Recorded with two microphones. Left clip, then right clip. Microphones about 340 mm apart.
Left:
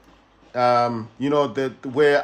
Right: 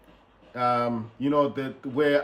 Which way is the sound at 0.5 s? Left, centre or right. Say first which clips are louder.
Left 6 dB; centre.